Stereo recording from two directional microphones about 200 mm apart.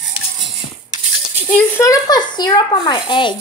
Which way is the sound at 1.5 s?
15° left (ahead or behind).